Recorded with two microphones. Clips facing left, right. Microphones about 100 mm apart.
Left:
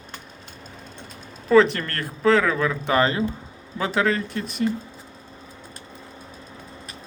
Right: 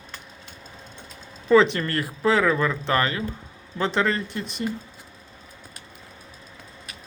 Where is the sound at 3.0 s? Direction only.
25° left (ahead or behind).